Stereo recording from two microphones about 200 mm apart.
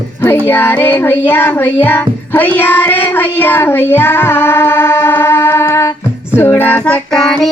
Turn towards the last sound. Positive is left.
turn(degrees=5)  # may be behind; listen again after turning